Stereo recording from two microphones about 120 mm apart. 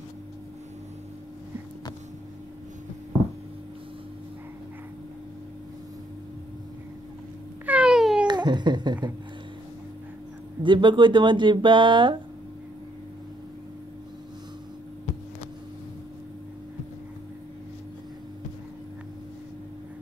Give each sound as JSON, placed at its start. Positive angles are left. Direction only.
{"t": 7.6, "sound": "a sound", "side_deg": -10}
{"t": 8.3, "sound": "a woman's voice", "side_deg": -40}
{"t": 10.6, "sound": "speech", "side_deg": -40}